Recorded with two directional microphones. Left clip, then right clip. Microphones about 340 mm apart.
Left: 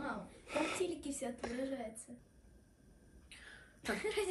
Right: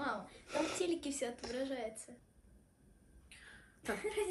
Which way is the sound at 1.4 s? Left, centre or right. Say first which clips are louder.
Right 1 dB; centre.